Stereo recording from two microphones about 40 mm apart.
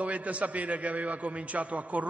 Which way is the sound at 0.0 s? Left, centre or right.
Right.